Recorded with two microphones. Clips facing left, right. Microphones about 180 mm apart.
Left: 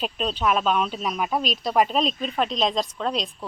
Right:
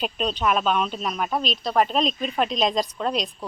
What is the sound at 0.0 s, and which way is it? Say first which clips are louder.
Speech: even; centre (ahead or behind).